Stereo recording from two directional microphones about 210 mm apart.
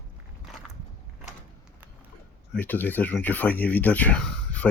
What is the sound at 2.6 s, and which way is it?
Speech, 10° left (ahead or behind).